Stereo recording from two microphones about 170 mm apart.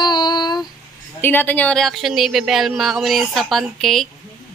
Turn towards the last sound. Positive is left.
turn(degrees=0)  # may be behind; listen again after turning